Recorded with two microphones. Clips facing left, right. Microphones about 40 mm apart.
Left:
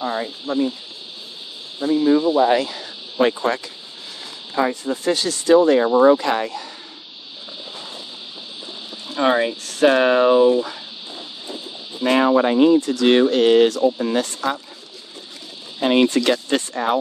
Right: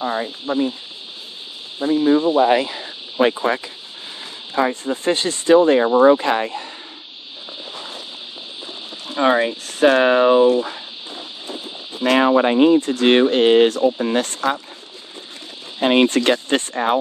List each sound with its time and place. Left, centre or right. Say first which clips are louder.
0.0 s speech: right 1 dB; centre
1.8 s speech: right 1 dB; right
4.8 s speech: right 1 dB; right
9.1 s speech: right 1 dB; centre
9.7 s speech: right 1 dB; right
10.6 s cricket: right 1 dB; right
12.2 s speech: right 1 dB; right
12.5 s speech: right 1 dB; right
15.8 s speech: right 1 dB; right